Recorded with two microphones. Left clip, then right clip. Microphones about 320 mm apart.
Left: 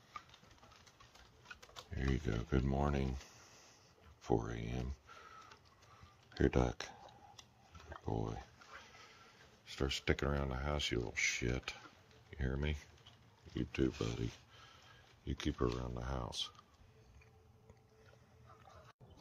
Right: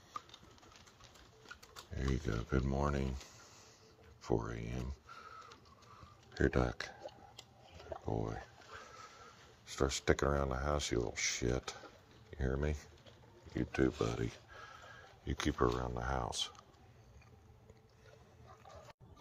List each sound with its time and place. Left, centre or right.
2.0 s speech: centre
6.3 s speech: centre
8.0 s speech: centre
8.7 s a sound: right
9.7 s speech: centre